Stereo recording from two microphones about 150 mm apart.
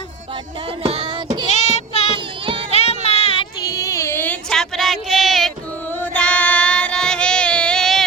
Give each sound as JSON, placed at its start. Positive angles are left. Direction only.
{"t": 0.8, "sound": "music", "side_deg": -40}
{"t": 1.5, "sound": "child singing", "side_deg": 50}
{"t": 2.1, "sound": "children playing", "side_deg": -35}
{"t": 2.7, "sound": "music", "side_deg": 45}
{"t": 3.6, "sound": "a sound", "side_deg": 20}
{"t": 6.0, "sound": "child singing", "side_deg": 10}